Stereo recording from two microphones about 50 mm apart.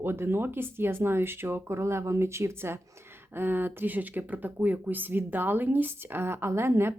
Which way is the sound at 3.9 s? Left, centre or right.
Right.